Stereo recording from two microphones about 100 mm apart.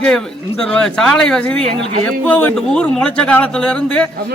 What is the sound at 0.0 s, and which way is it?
A man's voice, 10° left (ahead or behind).